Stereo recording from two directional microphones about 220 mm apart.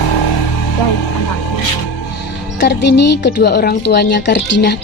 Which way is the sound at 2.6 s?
50° left (ahead or behind).